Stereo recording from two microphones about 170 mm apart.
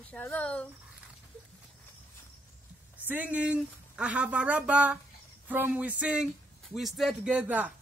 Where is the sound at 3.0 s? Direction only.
10° right (ahead or behind).